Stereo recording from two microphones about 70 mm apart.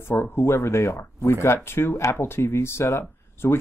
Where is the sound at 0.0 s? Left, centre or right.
Left.